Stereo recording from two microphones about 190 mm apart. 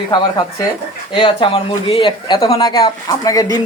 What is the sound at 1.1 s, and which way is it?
Speech, 25° left (ahead or behind).